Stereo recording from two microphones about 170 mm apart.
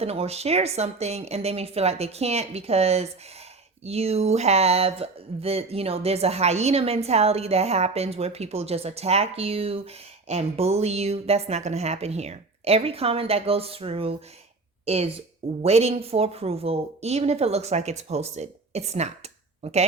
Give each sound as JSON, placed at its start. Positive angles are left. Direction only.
{"t": 0.0, "sound": "a woman's voice", "side_deg": -35}